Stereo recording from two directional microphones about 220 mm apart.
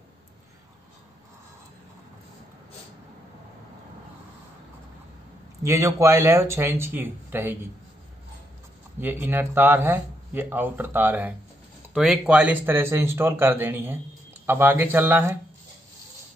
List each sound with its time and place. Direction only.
5.6 s speech: 15° right (ahead or behind)
9.0 s speech: 10° right (ahead or behind)